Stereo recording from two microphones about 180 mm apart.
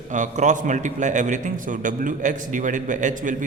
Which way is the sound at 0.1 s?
40° right (ahead or behind).